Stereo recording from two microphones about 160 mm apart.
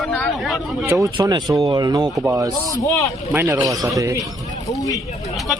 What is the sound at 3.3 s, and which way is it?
Speech, 10° right (ahead or behind).